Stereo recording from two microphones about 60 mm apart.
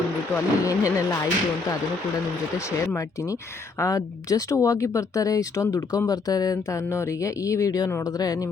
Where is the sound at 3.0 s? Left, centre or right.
Left.